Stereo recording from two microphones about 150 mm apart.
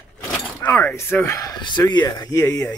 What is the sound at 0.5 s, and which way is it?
Speech, 15° left (ahead or behind).